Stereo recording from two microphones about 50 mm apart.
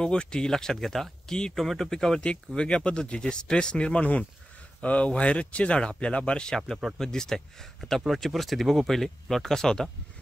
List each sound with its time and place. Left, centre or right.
0.0 s speech: centre